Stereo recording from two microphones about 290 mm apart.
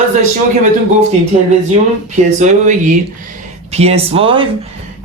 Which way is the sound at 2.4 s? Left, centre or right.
Right.